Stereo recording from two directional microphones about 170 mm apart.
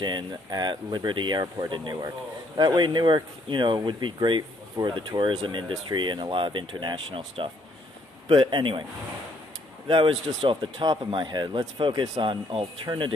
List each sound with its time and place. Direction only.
0.0 s speech: 25° right (ahead or behind)
9.9 s speech: 30° right (ahead or behind)